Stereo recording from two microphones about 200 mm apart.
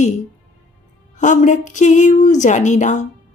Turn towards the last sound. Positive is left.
turn(degrees=35)  # may be behind; listen again after turning